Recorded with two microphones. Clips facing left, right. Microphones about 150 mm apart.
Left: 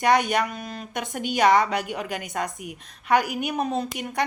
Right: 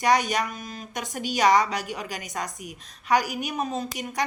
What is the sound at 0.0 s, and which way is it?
A woman's voice, 55° left (ahead or behind).